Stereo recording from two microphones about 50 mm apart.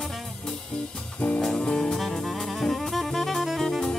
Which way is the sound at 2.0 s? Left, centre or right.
Centre.